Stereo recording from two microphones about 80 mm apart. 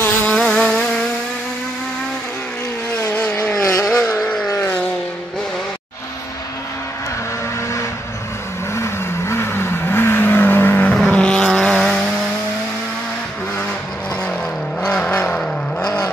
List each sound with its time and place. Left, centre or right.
0.0 s vehicle: left
0.4 s vehicle: centre
3.6 s vehicle: left
4.2 s vehicle: centre
8.7 s vehicle: left
10.9 s vehicle: centre
14.8 s vehicle: centre